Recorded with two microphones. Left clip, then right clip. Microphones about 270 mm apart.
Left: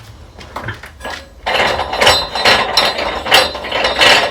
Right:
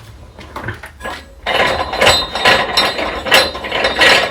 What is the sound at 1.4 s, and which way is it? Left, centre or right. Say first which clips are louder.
Mechanisms: even; centre.